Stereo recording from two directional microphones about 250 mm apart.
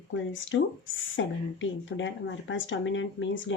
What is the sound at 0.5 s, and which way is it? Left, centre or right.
Speech, left.